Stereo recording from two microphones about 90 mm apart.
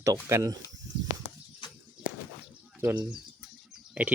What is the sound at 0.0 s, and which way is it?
Speech, 35° right (ahead or behind).